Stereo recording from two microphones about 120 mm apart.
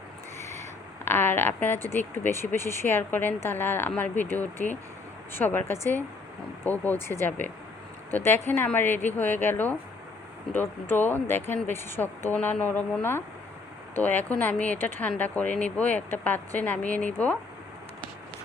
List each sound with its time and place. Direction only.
1.0 s speech: 15° left (ahead or behind)